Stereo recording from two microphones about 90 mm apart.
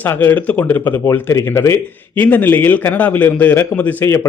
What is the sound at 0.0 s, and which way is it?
Speech, 20° left (ahead or behind).